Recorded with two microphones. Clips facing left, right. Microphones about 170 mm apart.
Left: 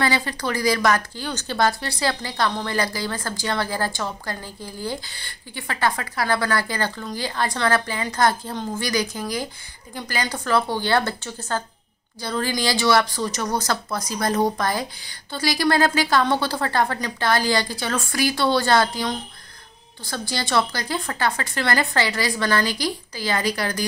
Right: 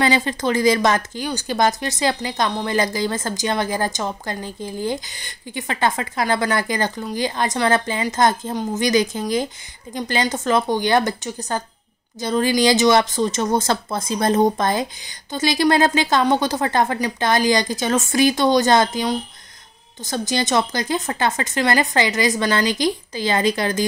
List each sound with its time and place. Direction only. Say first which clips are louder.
0.0 s a woman's voice: right 4 dB; 20° right (ahead or behind)